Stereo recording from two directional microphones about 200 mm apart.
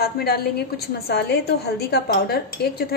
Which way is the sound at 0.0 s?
50° left (ahead or behind).